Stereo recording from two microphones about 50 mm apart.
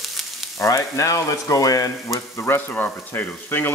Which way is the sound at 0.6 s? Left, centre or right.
Left.